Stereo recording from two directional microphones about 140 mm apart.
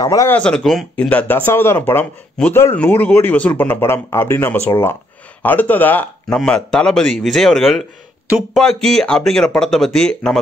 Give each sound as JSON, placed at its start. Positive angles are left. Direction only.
{"t": 0.0, "sound": "speech", "side_deg": 25}
{"t": 0.3, "sound": "a man's voice", "side_deg": 5}